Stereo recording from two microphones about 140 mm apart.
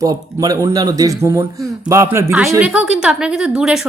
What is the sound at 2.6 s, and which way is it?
Speech, 5° right (ahead or behind).